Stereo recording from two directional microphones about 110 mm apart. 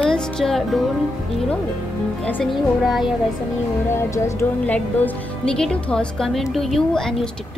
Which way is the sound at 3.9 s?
25° left (ahead or behind).